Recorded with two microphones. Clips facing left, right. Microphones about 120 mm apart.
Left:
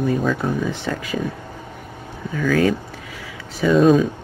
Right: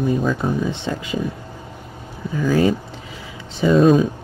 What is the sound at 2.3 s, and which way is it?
Speech, 20° right (ahead or behind).